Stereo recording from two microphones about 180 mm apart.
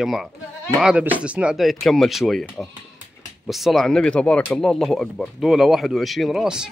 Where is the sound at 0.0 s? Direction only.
Centre (ahead or behind).